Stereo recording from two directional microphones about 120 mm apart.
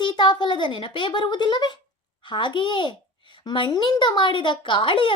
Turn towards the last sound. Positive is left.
turn(degrees=45)  # may be behind; listen again after turning